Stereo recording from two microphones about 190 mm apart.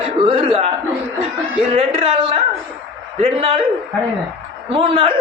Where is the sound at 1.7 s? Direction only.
30° right (ahead or behind).